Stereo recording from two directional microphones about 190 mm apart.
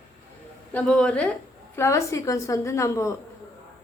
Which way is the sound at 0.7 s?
5° left (ahead or behind).